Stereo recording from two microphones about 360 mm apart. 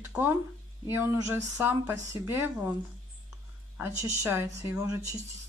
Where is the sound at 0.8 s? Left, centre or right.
Centre.